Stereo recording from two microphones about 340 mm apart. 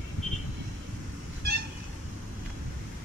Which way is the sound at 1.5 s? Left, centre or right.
Right.